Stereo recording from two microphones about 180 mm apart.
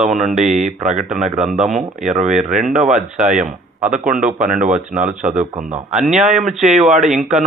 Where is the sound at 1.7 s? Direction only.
45° right (ahead or behind).